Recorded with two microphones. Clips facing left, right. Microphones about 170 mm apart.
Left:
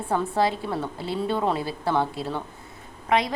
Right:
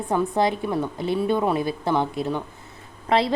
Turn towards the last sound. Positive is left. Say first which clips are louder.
# right 2 dB
turn(degrees=-30)  # may be behind; listen again after turning